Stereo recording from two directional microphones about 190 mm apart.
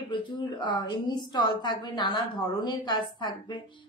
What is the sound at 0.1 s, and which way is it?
A woman's voice, 25° left (ahead or behind).